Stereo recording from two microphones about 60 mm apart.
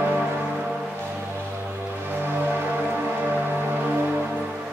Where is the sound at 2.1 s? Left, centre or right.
Right.